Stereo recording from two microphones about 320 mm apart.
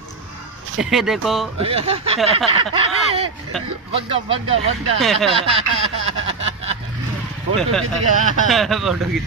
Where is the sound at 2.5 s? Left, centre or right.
Centre.